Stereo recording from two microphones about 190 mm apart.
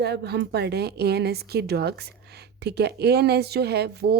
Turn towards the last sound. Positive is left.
turn(degrees=-60)  # may be behind; listen again after turning